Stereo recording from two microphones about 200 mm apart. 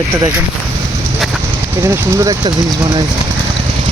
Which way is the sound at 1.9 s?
15° right (ahead or behind).